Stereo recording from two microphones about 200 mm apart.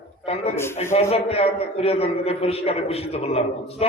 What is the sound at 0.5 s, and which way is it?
Speech, 10° left (ahead or behind).